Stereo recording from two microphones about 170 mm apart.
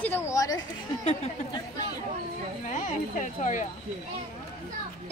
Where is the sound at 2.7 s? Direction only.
45° left (ahead or behind).